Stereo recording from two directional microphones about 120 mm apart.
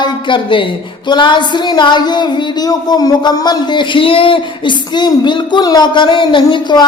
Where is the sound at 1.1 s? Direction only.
40° left (ahead or behind).